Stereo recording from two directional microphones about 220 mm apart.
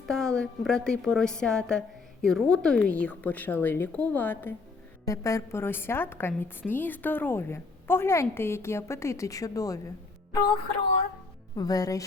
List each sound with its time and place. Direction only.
0.0 s a woman's voice: centre (ahead or behind)
11.5 s a woman's voice: 15° left (ahead or behind)